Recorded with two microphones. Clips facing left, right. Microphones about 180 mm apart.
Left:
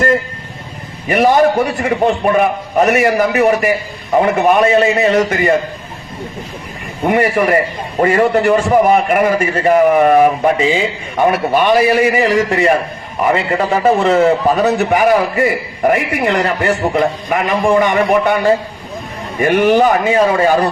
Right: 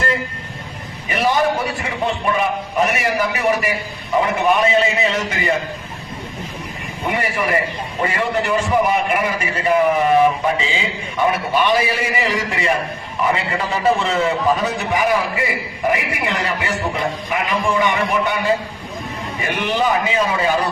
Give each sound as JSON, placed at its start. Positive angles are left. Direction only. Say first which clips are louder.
{"t": 1.0, "sound": "a man's voice", "louder": "left 7 dB", "side_deg": 55}
{"t": 7.0, "sound": "a man's voice", "louder": "left 9 dB", "side_deg": 50}